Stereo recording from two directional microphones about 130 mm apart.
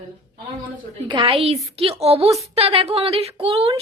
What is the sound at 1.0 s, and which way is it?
A woman's voice, 45° right (ahead or behind).